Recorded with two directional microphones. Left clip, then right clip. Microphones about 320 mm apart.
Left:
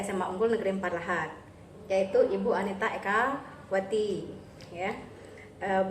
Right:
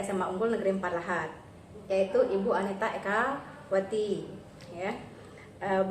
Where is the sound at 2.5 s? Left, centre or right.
Centre.